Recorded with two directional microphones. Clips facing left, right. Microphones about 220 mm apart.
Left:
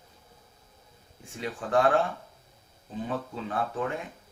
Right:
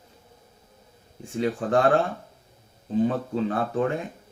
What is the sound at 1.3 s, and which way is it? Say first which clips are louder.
Speech: right 4 dB; 35° right (ahead or behind).